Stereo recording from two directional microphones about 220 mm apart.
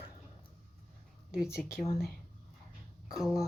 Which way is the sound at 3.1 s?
Centre (ahead or behind).